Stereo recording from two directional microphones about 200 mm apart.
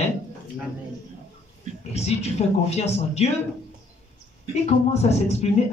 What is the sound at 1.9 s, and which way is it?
A woman's voice, 30° left (ahead or behind).